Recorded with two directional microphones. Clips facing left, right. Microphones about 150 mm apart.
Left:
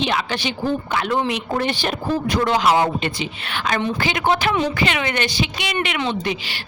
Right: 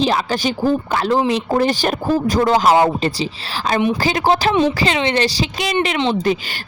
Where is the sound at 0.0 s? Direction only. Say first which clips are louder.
Right 5 dB; 35° right (ahead or behind).